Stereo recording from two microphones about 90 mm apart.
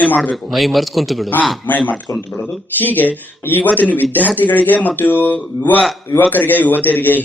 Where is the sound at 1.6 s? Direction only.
15° left (ahead or behind).